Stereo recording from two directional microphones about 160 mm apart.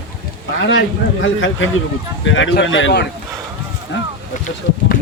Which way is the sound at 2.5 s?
90° left.